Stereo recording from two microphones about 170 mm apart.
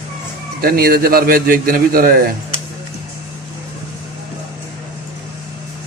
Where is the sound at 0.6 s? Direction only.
60° right (ahead or behind).